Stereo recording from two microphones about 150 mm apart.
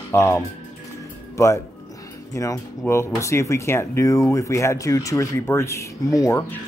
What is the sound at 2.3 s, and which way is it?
Speech, 20° left (ahead or behind).